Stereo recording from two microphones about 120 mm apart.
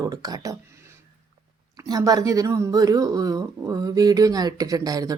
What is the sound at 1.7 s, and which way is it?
Speech, 30° right (ahead or behind).